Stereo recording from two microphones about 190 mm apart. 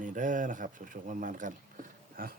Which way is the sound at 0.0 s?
45° right (ahead or behind).